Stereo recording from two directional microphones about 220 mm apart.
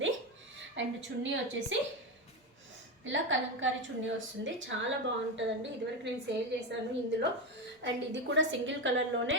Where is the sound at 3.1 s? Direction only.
60° right (ahead or behind).